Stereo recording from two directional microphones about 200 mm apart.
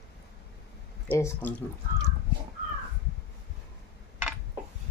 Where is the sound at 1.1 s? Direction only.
10° left (ahead or behind).